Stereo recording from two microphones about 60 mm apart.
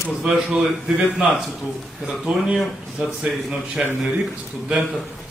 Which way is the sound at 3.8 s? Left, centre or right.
Centre.